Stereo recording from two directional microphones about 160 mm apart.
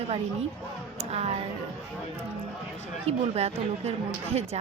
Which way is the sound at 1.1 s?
40° right (ahead or behind).